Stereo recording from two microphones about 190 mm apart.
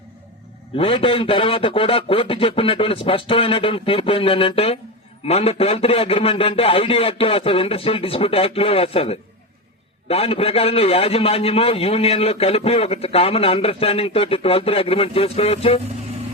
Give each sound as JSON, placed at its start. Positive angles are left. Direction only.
{"t": 0.8, "sound": "a man's voice", "side_deg": 30}